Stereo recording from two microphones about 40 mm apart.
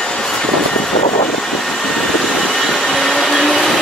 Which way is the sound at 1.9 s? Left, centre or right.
Centre.